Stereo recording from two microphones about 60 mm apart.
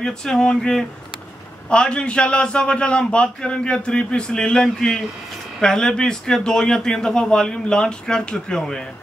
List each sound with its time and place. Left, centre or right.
0.0 s a man's voice: centre